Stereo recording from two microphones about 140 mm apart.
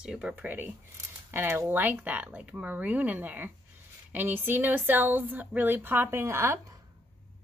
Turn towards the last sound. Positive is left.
turn(degrees=-20)  # may be behind; listen again after turning